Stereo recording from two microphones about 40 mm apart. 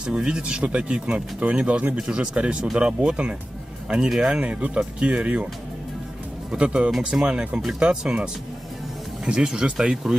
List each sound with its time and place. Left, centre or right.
0.0 s speech: right
3.0 s speech: right
3.9 s speech: centre
4.4 s speech: right
6.5 s speech: right